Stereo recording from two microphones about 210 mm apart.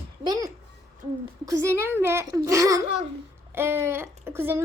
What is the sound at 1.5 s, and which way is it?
A woman's voice, 15° right (ahead or behind).